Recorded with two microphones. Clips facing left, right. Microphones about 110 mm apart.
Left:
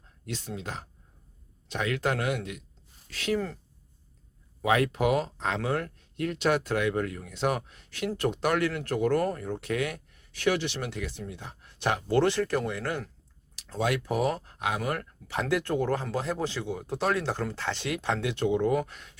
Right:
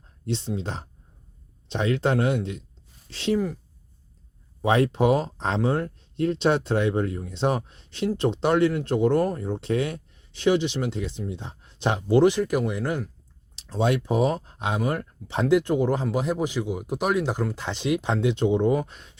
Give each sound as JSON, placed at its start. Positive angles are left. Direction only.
{"t": 0.3, "sound": "speech", "side_deg": -25}
{"t": 3.3, "sound": "speech", "side_deg": -15}
{"t": 4.6, "sound": "speech", "side_deg": -30}